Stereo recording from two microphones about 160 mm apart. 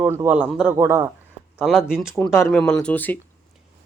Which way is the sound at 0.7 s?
15° right (ahead or behind).